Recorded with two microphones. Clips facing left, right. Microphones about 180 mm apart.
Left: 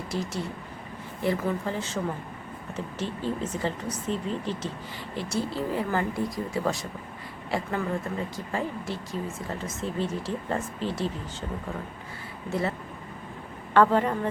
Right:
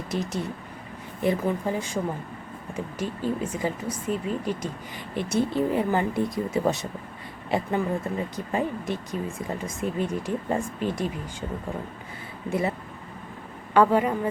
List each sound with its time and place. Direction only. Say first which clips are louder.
0.1 s speech: right 3 dB; 20° right (ahead or behind)
12.5 s speech: right 2 dB; 15° right (ahead or behind)
13.7 s speech: right 1 dB; 10° right (ahead or behind)